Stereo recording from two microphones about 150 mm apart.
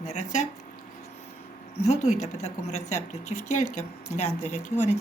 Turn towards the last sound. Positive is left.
turn(degrees=50)  # may be behind; listen again after turning